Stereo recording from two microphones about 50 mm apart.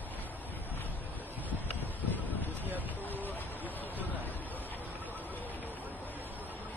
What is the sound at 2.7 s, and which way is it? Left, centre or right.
Speech, right.